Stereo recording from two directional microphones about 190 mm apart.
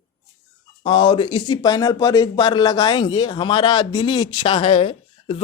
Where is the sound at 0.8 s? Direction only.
25° left (ahead or behind).